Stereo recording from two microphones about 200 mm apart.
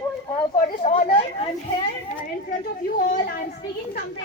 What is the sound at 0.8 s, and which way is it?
Speech, 30° left (ahead or behind).